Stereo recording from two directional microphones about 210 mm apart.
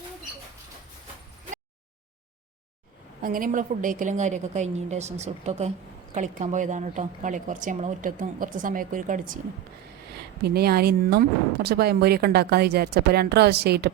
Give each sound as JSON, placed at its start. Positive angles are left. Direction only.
{"t": 3.2, "sound": "a woman's voice", "side_deg": -40}
{"t": 10.4, "sound": "speech", "side_deg": -50}